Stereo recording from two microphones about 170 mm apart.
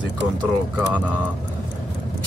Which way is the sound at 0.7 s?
5° right (ahead or behind).